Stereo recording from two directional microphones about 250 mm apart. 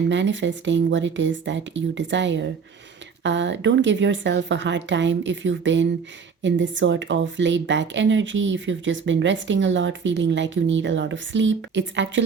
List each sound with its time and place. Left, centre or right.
0.1 s a woman's voice: right